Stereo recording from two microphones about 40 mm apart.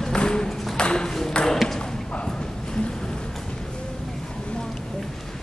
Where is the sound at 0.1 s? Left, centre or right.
Left.